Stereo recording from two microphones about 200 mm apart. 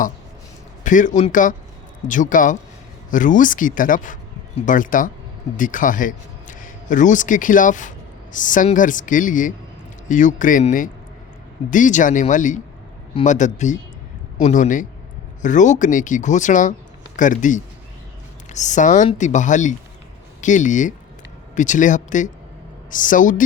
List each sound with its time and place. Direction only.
0.9 s a man's voice: 40° left (ahead or behind)